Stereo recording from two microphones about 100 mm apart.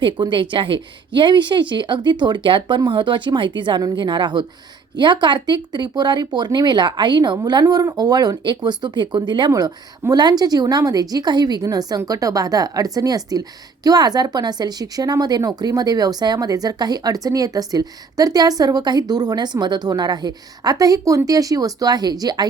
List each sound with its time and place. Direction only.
0.0 s a woman's voice: 55° right (ahead or behind)
9.5 s a woman's voice: 40° right (ahead or behind)